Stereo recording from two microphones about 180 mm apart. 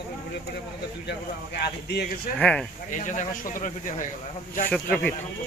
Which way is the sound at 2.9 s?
45° left (ahead or behind).